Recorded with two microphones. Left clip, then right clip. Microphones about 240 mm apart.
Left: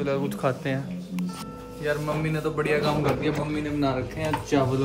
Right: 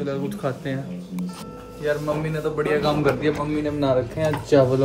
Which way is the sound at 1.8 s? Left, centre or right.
Centre.